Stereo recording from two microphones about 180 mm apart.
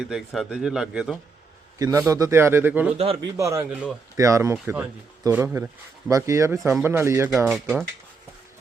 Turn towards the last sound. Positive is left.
turn(degrees=0)  # may be behind; listen again after turning